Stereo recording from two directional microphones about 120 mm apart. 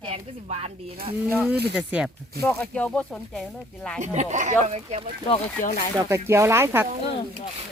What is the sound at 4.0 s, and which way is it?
Speech, 80° right.